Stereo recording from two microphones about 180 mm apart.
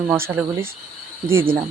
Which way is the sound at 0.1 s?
10° right (ahead or behind).